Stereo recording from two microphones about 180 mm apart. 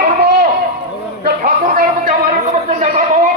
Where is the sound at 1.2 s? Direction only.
50° right (ahead or behind).